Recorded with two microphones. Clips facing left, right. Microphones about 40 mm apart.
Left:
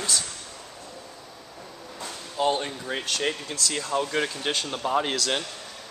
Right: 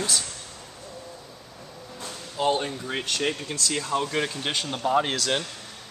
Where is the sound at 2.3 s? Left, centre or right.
Centre.